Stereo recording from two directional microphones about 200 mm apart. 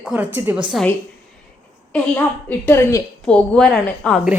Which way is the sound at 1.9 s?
10° left (ahead or behind).